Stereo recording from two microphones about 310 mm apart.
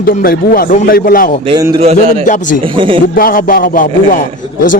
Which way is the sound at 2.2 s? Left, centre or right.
Left.